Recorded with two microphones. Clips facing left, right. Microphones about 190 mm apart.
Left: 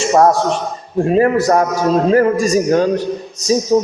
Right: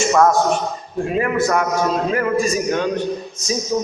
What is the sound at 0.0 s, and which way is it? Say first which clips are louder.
A man's voice: left 3 dB; 35° left (ahead or behind).